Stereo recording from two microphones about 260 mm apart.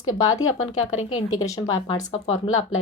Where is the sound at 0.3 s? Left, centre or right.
Centre.